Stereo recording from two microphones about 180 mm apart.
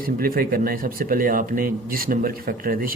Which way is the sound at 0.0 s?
55° right (ahead or behind).